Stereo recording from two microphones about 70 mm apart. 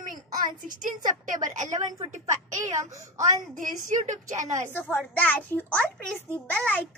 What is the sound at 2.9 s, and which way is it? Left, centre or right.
Speech, right.